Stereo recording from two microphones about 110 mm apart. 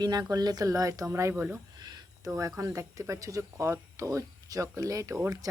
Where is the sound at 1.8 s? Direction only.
40° right (ahead or behind).